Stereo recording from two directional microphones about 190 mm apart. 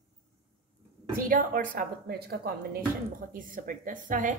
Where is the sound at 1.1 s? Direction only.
50° right (ahead or behind).